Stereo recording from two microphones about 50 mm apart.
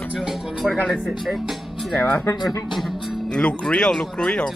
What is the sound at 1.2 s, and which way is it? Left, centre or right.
Speech, centre.